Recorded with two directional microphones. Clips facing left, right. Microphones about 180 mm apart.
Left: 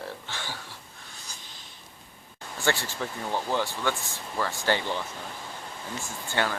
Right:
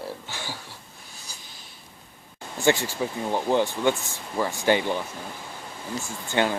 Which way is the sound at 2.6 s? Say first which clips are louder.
Right 6 dB; 15° right (ahead or behind).